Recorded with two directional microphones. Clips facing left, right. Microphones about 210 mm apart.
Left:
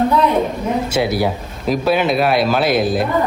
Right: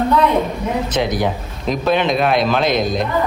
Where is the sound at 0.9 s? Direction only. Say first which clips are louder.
Left 1 dB; 10° left (ahead or behind).